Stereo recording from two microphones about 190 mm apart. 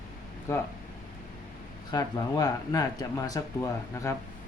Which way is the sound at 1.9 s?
20° left (ahead or behind).